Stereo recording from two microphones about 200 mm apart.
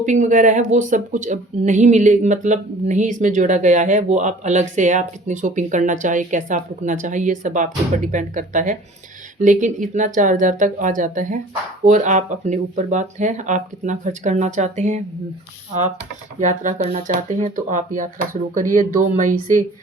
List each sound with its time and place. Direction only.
0.0 s speech: 40° right (ahead or behind)
16.4 s speech: 35° right (ahead or behind)